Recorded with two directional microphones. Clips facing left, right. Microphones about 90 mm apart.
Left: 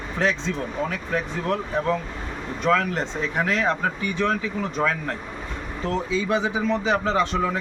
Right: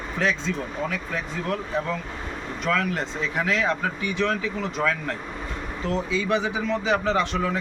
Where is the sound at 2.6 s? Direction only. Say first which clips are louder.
Left 3 dB; 30° left (ahead or behind).